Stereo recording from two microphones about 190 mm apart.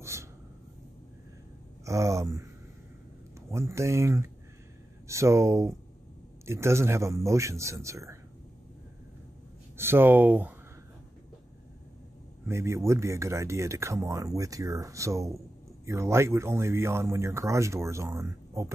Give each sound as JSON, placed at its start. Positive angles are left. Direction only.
{"t": 0.0, "sound": "a sound", "side_deg": -15}
{"t": 1.9, "sound": "speech", "side_deg": -15}
{"t": 3.5, "sound": "speech", "side_deg": -15}
{"t": 9.8, "sound": "speech", "side_deg": -10}
{"t": 12.4, "sound": "speech", "side_deg": -15}